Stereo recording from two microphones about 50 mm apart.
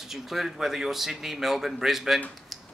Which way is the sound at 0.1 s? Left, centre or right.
Centre.